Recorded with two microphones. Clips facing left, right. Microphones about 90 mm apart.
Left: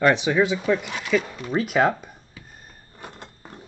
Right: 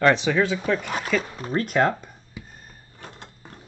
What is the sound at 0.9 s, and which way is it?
Speech, 45° right (ahead or behind).